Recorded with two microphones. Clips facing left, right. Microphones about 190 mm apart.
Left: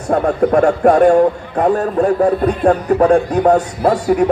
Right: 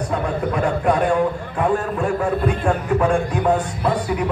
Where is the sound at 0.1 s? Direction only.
45° left (ahead or behind).